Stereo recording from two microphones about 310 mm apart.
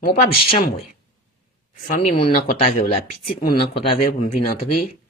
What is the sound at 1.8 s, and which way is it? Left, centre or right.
Speech, left.